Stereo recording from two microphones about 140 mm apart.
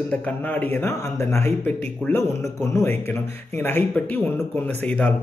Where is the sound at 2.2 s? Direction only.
20° left (ahead or behind).